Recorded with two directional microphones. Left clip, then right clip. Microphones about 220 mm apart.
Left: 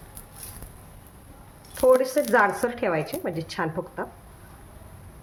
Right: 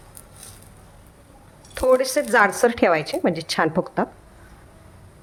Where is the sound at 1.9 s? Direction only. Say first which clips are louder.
Right 3 dB; 45° right (ahead or behind).